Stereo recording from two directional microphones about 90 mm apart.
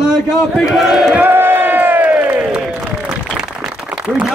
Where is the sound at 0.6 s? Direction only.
5° right (ahead or behind).